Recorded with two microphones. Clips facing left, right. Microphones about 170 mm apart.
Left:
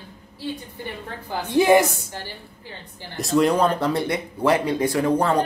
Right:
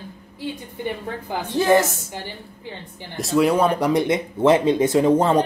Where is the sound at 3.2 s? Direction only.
5° right (ahead or behind).